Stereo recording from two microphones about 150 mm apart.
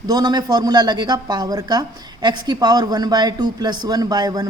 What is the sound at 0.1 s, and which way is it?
Speech, 25° right (ahead or behind).